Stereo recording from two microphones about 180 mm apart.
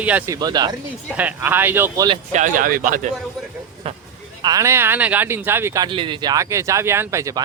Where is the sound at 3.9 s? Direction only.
30° right (ahead or behind).